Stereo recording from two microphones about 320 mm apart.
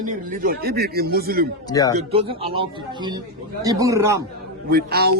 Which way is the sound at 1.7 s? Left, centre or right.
Centre.